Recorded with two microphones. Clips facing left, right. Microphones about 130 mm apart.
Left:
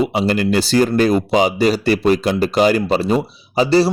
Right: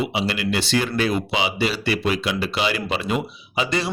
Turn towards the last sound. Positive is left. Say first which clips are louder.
# left 10 dB
turn(degrees=35)  # may be behind; listen again after turning